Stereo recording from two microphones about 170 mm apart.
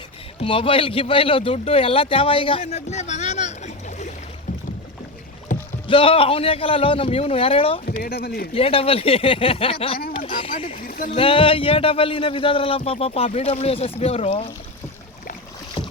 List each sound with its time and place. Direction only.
0.3 s a man's voice: 30° left (ahead or behind)
5.9 s a man's voice: 30° left (ahead or behind)
7.9 s speech: 60° left (ahead or behind)
8.5 s a man's voice: 35° left (ahead or behind)
10.2 s a sound: 30° left (ahead or behind)
10.8 s a sound: 55° left (ahead or behind)
11.1 s a man's voice: 35° left (ahead or behind)